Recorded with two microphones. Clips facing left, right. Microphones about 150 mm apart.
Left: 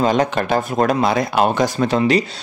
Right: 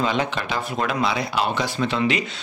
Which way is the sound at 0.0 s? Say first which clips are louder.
Left 6 dB; 45° left (ahead or behind).